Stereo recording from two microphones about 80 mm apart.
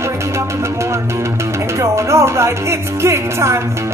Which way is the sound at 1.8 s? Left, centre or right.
Right.